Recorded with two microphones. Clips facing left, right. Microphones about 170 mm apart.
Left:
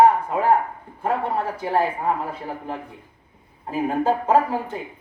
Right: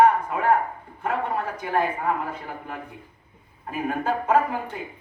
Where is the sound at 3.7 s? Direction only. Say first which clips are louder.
Left 5 dB; 30° left (ahead or behind).